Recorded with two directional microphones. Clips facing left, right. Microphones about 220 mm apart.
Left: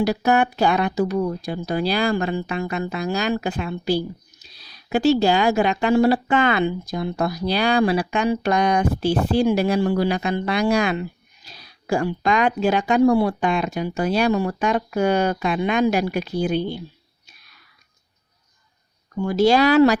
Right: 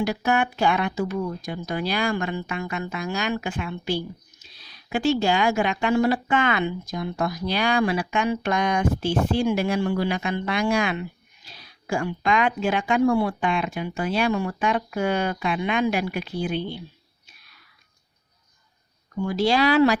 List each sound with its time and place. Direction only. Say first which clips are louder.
0.0 s speech: left 4 dB; 35° left (ahead or behind)
19.3 s speech: left 5 dB; 45° left (ahead or behind)